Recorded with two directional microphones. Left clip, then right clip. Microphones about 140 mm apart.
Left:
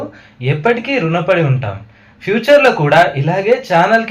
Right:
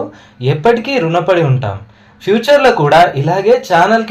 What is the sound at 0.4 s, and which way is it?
Speech, 35° right (ahead or behind).